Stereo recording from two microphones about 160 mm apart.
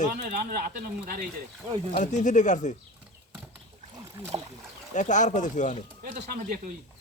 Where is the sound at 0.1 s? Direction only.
70° right (ahead or behind).